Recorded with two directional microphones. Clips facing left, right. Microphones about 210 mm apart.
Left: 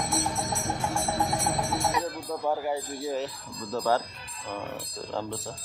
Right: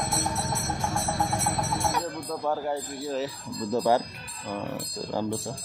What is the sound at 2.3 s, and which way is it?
Speech, 10° left (ahead or behind).